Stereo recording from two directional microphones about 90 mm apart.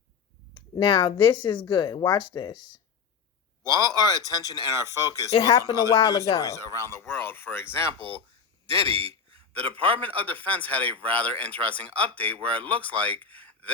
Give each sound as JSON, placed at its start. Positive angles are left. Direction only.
{"t": 0.8, "sound": "speech", "side_deg": 60}
{"t": 3.6, "sound": "speech", "side_deg": -40}
{"t": 4.9, "sound": "speech", "side_deg": 40}
{"t": 8.6, "sound": "a man's voice", "side_deg": -90}
{"t": 9.5, "sound": "speech", "side_deg": 20}
{"t": 13.2, "sound": "a sound", "side_deg": 15}